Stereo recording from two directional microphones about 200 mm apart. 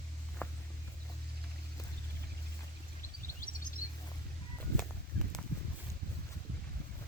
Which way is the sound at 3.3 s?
45° left (ahead or behind).